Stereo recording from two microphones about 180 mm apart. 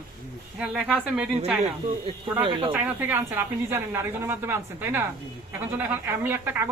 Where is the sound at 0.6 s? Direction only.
5° right (ahead or behind).